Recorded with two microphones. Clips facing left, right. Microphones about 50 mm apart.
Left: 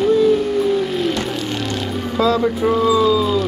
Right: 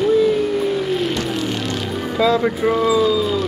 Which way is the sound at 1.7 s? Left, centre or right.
Centre.